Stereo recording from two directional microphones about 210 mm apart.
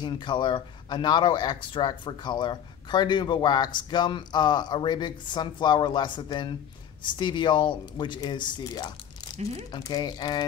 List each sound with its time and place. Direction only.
0.0 s speech: 20° left (ahead or behind)
9.4 s speech: 30° right (ahead or behind)
9.7 s speech: 20° left (ahead or behind)